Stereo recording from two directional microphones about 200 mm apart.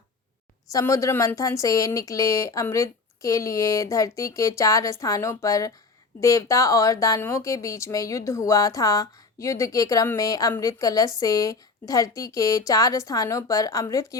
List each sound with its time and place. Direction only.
0.7 s speech: 15° left (ahead or behind)